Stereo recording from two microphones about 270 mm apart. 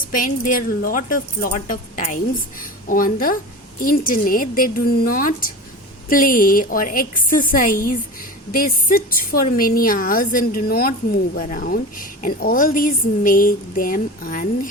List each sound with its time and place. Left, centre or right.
0.1 s a woman's voice: left